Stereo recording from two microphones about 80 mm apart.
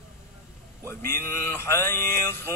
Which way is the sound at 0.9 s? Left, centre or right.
Left.